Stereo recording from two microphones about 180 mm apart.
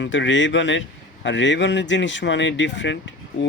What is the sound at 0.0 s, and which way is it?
Speech, 90° left.